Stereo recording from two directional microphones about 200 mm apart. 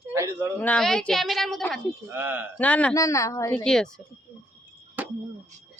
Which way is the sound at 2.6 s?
5° left (ahead or behind).